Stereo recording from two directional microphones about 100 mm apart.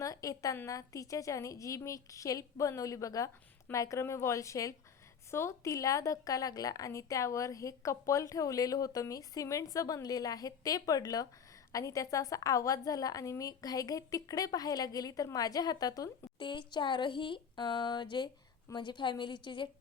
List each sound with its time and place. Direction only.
0.0 s a sound: 35° left (ahead or behind)
0.5 s a woman's voice: 30° left (ahead or behind)
16.4 s speech: 50° left (ahead or behind)